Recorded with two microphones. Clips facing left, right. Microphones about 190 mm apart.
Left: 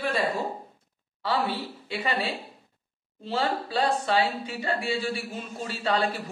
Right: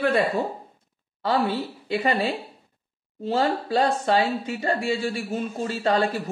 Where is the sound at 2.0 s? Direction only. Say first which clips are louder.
Right 5 dB; 40° right (ahead or behind).